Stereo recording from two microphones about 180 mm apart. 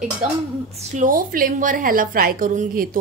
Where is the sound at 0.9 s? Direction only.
50° right (ahead or behind).